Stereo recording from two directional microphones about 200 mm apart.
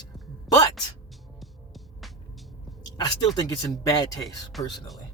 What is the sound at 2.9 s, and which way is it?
Speech, 20° left (ahead or behind).